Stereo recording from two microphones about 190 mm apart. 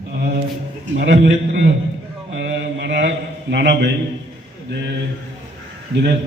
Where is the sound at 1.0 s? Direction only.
65° right (ahead or behind).